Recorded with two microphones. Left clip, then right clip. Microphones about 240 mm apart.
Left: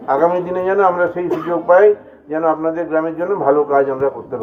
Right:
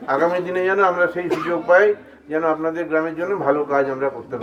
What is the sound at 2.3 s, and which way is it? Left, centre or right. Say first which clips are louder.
A man's voice: left 4 dB; right.